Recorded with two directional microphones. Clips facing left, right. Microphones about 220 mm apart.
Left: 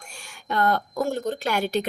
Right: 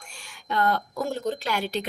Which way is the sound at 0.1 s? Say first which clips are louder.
Left 1 dB; 45° left (ahead or behind).